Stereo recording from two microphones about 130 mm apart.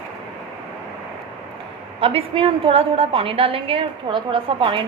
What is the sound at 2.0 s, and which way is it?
A woman's voice, 50° right (ahead or behind).